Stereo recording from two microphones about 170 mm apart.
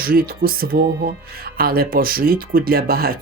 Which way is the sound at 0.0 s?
60° right (ahead or behind).